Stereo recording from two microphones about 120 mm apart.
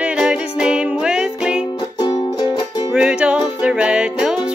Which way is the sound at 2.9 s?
10° right (ahead or behind).